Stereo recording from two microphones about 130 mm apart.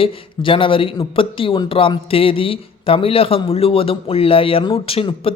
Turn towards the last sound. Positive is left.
turn(degrees=45)  # may be behind; listen again after turning